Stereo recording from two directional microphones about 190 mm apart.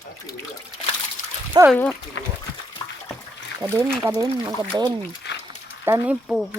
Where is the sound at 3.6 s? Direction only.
25° right (ahead or behind).